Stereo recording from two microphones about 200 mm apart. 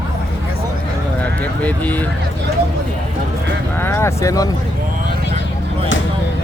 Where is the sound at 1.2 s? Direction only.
5° left (ahead or behind).